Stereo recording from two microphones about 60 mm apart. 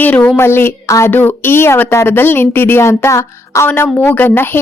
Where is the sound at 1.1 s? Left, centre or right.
Left.